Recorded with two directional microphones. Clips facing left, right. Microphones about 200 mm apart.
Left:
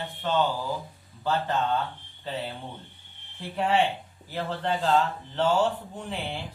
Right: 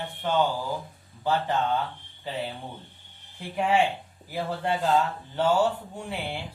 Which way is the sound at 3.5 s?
10° right (ahead or behind).